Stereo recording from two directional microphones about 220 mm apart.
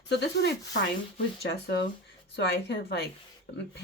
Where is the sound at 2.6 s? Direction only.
50° left (ahead or behind).